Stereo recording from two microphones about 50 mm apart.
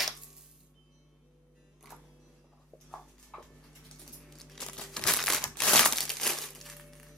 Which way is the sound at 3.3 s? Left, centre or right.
Centre.